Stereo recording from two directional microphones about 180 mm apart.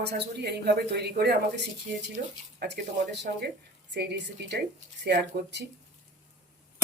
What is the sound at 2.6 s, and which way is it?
Speech, 65° right (ahead or behind).